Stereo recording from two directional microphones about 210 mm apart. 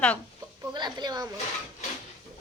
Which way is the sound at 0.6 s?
20° right (ahead or behind).